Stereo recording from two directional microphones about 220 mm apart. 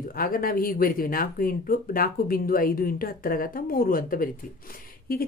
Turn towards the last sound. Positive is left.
turn(degrees=40)  # may be behind; listen again after turning